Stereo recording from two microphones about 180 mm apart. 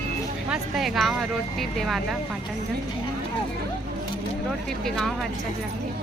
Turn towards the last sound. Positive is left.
turn(degrees=0)  # may be behind; listen again after turning